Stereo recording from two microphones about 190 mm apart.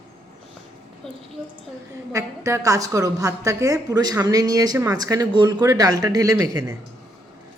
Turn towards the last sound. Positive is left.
turn(degrees=-20)  # may be behind; listen again after turning